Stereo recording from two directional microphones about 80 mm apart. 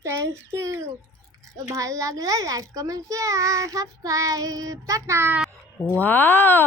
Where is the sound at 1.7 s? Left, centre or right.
Right.